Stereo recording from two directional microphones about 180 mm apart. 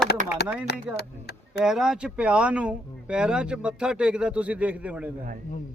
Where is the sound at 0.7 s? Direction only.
65° left (ahead or behind).